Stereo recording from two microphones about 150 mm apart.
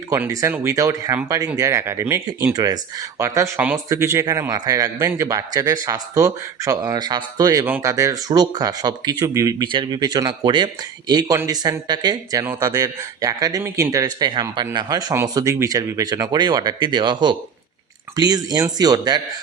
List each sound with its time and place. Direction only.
0.1 s a man's voice: 20° right (ahead or behind)